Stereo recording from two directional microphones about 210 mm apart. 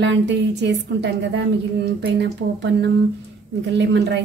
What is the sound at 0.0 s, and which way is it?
A woman's voice, 55° right (ahead or behind).